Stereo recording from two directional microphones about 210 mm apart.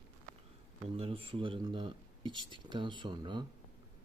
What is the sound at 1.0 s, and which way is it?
Speech, 25° right (ahead or behind).